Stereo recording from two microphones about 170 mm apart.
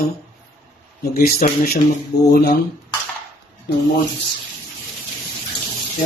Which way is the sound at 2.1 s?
75° left (ahead or behind).